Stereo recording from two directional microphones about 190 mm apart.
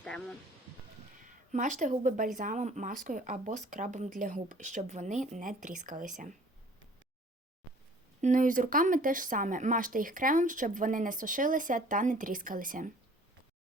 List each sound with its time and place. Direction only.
0.0 s speech: 5° left (ahead or behind)
1.2 s a woman's voice: 40° right (ahead or behind)
8.2 s speech: 45° right (ahead or behind)